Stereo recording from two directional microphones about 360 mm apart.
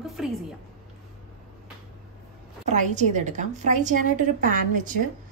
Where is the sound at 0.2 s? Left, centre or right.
Centre.